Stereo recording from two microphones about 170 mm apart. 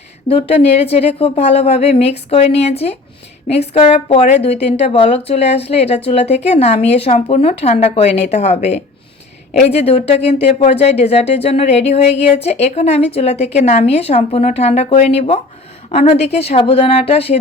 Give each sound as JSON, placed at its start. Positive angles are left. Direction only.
{"t": 0.3, "sound": "speech", "side_deg": 35}